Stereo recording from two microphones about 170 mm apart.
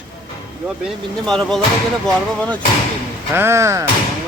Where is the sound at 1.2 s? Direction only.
5° left (ahead or behind).